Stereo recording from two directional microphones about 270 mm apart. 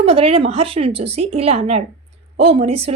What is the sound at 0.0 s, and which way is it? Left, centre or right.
Speech, right.